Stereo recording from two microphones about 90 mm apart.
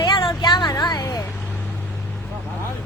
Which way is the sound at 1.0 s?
35° left (ahead or behind).